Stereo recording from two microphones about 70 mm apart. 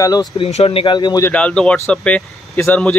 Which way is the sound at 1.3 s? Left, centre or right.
Centre.